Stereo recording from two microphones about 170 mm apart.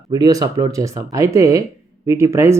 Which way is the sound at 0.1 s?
20° right (ahead or behind).